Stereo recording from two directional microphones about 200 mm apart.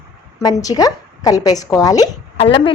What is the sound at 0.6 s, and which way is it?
A woman's voice, 20° left (ahead or behind).